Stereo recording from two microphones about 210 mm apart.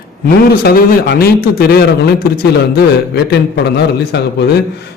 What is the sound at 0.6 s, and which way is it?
A man's voice, 45° left (ahead or behind).